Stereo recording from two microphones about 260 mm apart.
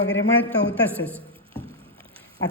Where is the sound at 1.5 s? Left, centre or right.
Right.